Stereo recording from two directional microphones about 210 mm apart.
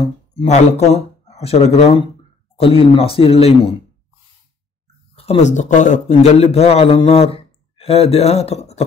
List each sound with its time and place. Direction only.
0.3 s a man's voice: 30° left (ahead or behind)
5.1 s a man's voice: 30° left (ahead or behind)